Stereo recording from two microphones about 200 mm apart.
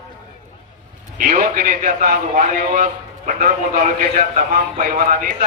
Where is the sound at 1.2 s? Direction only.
40° right (ahead or behind).